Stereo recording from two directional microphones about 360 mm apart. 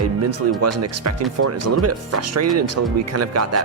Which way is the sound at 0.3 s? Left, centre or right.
Right.